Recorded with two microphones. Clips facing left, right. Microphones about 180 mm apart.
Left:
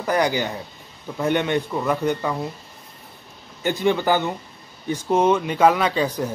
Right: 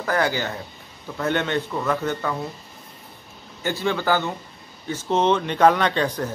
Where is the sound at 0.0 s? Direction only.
15° left (ahead or behind).